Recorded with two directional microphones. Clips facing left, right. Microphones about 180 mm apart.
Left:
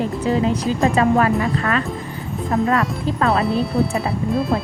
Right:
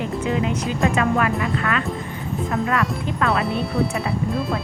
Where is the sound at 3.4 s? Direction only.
Centre (ahead or behind).